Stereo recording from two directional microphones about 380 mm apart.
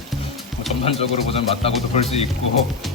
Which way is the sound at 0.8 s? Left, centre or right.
Centre.